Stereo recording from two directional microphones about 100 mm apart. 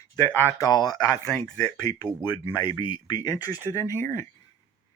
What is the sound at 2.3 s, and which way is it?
Speech, 55° left (ahead or behind).